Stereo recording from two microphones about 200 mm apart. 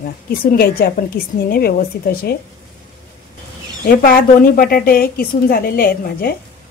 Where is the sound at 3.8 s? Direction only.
45° left (ahead or behind).